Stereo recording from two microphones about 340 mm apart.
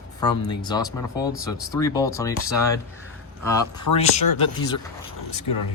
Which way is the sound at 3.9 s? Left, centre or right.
Left.